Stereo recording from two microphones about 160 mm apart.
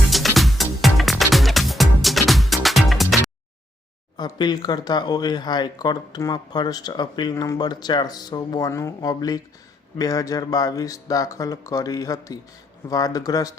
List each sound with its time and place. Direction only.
0.1 s music: centre (ahead or behind)
4.2 s speech: 25° left (ahead or behind)